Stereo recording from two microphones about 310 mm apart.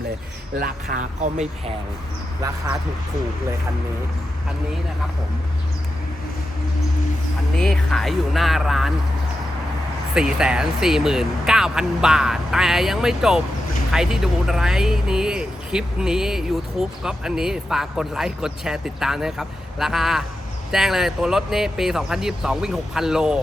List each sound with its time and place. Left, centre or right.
0.6 s speech: right
7.6 s speech: centre
10.2 s speech: centre